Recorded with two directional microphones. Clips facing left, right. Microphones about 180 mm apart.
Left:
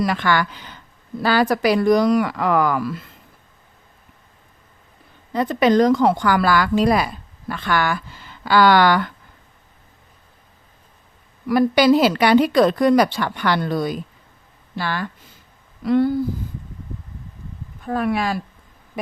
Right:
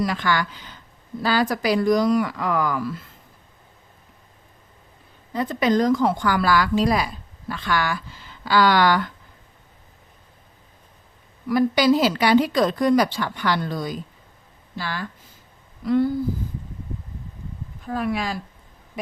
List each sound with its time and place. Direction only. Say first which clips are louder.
0.0 s a woman's voice: left 3 dB; 65° left (ahead or behind)
5.3 s a woman's voice: left 4 dB; 70° left (ahead or behind)
11.4 s a woman's voice: left 3 dB; 65° left (ahead or behind)
17.8 s a woman's voice: left 4 dB; 60° left (ahead or behind)